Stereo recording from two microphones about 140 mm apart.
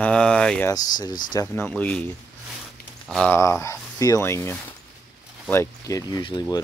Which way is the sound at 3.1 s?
5° left (ahead or behind).